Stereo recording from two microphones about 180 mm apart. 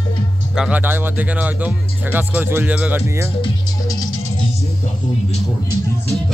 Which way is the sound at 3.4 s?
20° left (ahead or behind).